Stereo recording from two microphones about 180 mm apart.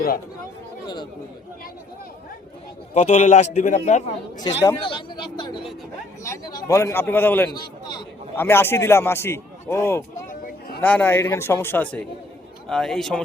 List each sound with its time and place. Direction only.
2.9 s a man's voice: 40° left (ahead or behind)
4.4 s a man's voice: 20° left (ahead or behind)
7.5 s speech: 25° left (ahead or behind)
8.4 s a man's voice: 10° left (ahead or behind)
10.2 s a sound: 50° left (ahead or behind)
10.8 s a man's voice: 10° left (ahead or behind)